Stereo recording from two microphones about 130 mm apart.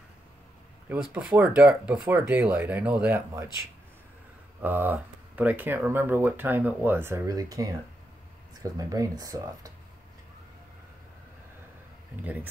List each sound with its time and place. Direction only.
1.2 s speech: 5° right (ahead or behind)
4.6 s speech: 15° right (ahead or behind)
8.7 s speech: 25° right (ahead or behind)
12.2 s speech: 15° right (ahead or behind)